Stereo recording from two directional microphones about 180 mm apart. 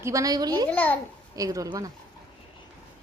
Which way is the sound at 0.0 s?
20° right (ahead or behind).